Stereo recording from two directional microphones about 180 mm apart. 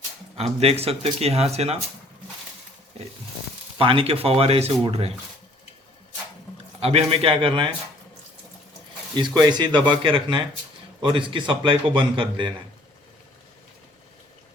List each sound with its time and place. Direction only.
0.3 s speech: 35° right (ahead or behind)
3.8 s speech: 30° right (ahead or behind)
6.7 s speech: 30° right (ahead or behind)
9.1 s a man's voice: 25° right (ahead or behind)